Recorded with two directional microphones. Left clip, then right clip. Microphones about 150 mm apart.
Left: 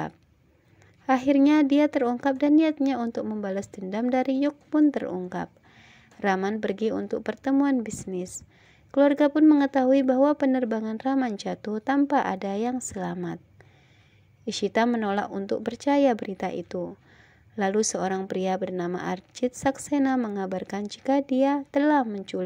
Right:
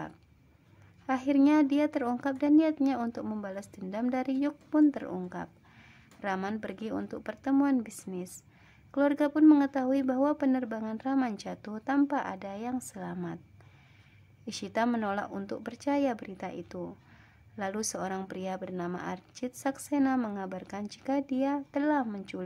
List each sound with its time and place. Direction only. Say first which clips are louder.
1.0 s a woman's voice: left 6 dB; 30° left (ahead or behind)
5.3 s a sound: left 7 dB; 30° left (ahead or behind)
6.6 s a woman's voice: left 10 dB; 25° left (ahead or behind)
14.4 s a woman's voice: left 7 dB; 25° left (ahead or behind)